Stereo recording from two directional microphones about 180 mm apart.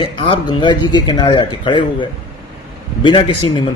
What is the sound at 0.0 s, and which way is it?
Speech, 30° left (ahead or behind).